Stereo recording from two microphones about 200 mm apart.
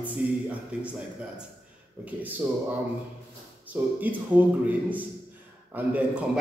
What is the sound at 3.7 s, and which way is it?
Speech, 10° right (ahead or behind).